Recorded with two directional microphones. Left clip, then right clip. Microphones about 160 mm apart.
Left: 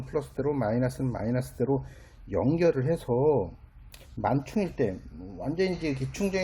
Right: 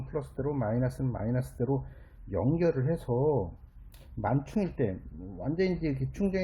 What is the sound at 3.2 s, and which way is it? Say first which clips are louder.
Speech: left 4 dB; 20° left (ahead or behind).